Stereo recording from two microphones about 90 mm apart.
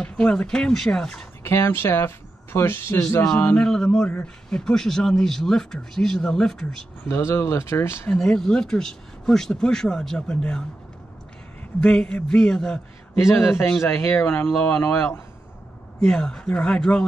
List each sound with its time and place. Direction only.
0.0 s speech: 15° left (ahead or behind)
1.4 s speech: 30° left (ahead or behind)
3.5 s a man's voice: 10° left (ahead or behind)
7.1 s speech: 30° left (ahead or behind)
8.1 s speech: 5° left (ahead or behind)
11.8 s speech: 10° left (ahead or behind)
13.2 s speech: 30° left (ahead or behind)
16.0 s speech: 5° left (ahead or behind)